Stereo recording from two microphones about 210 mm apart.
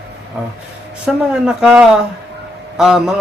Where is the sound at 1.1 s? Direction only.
Centre (ahead or behind).